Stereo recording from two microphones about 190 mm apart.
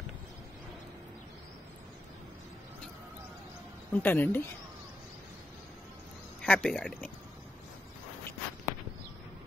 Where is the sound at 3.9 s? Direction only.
10° left (ahead or behind).